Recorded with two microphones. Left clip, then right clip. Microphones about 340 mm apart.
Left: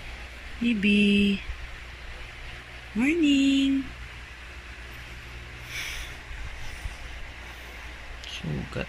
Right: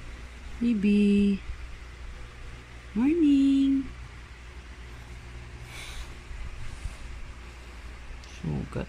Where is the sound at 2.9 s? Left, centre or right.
Centre.